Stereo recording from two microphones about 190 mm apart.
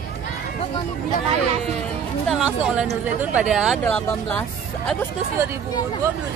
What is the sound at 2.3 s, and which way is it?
A woman's voice, 5° right (ahead or behind).